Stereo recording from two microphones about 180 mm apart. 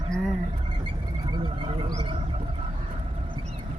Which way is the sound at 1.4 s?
25° right (ahead or behind).